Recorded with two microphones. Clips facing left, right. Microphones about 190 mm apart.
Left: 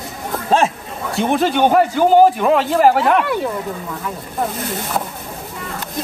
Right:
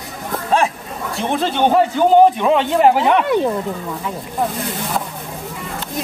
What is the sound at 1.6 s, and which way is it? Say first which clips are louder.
A man's voice: right 1 dB; 5° left (ahead or behind).